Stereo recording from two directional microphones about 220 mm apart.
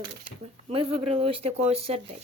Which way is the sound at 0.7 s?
25° right (ahead or behind).